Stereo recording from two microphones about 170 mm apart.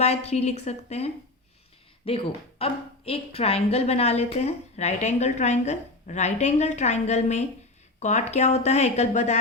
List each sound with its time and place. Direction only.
0.0 s a woman's voice: 40° left (ahead or behind)